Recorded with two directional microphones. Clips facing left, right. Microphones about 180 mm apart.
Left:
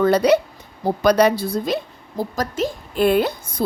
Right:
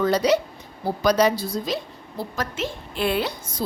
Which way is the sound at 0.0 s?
60° left (ahead or behind).